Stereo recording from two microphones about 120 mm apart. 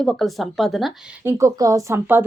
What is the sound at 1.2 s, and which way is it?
Speech, 25° right (ahead or behind).